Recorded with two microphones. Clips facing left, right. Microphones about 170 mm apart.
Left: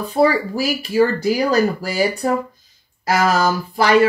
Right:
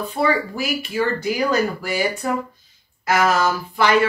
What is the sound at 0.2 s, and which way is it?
Speech, 35° left (ahead or behind).